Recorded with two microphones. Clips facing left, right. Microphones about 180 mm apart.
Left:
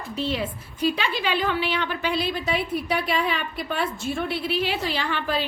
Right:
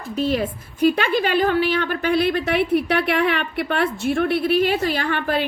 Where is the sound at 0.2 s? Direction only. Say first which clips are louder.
Right 6 dB; 45° right (ahead or behind).